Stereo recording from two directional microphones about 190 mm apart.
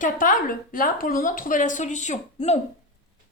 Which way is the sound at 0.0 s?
45° left (ahead or behind).